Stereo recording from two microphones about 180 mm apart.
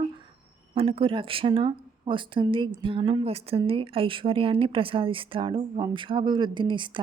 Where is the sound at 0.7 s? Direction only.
30° right (ahead or behind).